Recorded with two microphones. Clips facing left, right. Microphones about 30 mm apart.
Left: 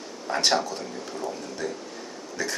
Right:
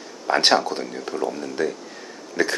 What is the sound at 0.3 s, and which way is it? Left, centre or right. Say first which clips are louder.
Speech: right 6 dB; right.